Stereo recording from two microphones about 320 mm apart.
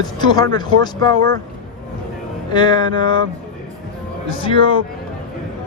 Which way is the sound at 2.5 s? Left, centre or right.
Centre.